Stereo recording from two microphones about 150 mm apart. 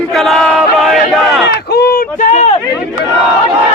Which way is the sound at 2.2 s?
55° left (ahead or behind).